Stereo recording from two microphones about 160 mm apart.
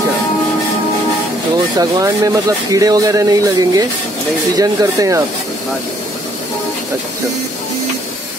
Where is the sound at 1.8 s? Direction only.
20° right (ahead or behind).